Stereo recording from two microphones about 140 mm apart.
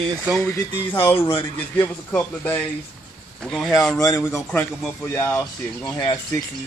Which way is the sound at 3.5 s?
Centre (ahead or behind).